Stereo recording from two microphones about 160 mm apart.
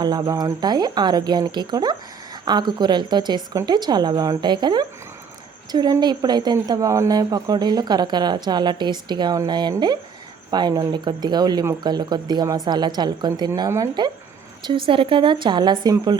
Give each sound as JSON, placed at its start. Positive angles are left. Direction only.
{"t": 0.0, "sound": "speech", "side_deg": -25}